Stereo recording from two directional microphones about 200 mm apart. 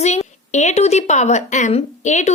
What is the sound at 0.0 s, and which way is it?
A woman's voice, 35° left (ahead or behind).